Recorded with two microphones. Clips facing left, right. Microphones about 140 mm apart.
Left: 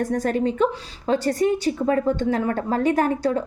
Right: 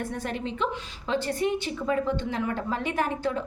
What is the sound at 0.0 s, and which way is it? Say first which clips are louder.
A woman's voice: left 10 dB; 40° left (ahead or behind).